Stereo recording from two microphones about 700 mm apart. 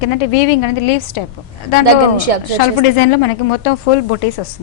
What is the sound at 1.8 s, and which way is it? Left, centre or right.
Speech, right.